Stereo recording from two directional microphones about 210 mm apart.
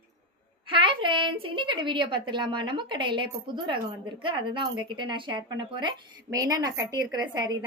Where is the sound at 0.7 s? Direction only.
25° right (ahead or behind).